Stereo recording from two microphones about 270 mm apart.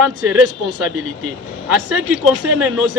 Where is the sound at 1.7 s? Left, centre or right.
Centre.